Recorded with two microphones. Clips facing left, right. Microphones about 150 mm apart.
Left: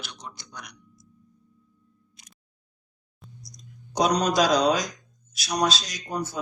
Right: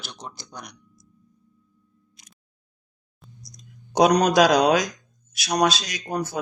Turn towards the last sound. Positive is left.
turn(degrees=-75)  # may be behind; listen again after turning